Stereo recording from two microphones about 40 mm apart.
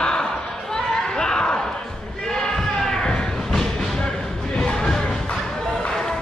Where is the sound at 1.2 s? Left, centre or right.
Centre.